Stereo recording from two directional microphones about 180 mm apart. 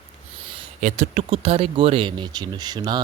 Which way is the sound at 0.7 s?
45° right (ahead or behind).